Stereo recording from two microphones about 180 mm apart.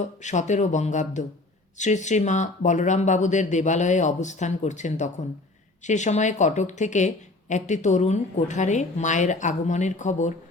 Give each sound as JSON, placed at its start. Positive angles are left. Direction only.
{"t": 0.0, "sound": "a woman's voice", "side_deg": 40}